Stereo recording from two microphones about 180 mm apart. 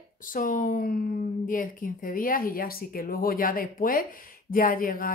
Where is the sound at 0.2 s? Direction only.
50° left (ahead or behind).